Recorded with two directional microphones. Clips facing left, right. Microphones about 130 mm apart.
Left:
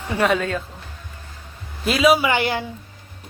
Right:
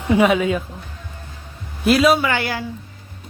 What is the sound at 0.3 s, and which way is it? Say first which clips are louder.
Speech: right 3 dB; 10° right (ahead or behind).